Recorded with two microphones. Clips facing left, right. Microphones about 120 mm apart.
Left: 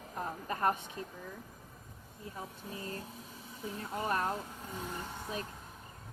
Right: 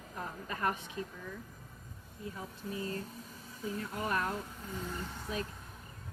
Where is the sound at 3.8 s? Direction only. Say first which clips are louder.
Left 2 dB; 30° left (ahead or behind).